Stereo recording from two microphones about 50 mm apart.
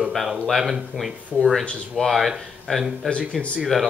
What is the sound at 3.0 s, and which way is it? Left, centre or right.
Speech, centre.